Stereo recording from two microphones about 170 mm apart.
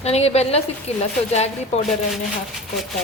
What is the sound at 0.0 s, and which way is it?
A woman's voice, 40° left (ahead or behind).